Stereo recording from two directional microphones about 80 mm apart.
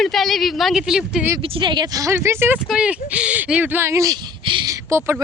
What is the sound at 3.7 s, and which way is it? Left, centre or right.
Speech, right.